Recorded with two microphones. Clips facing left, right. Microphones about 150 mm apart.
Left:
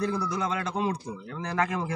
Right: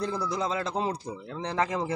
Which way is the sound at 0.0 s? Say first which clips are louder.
Left 1 dB; 20° right (ahead or behind).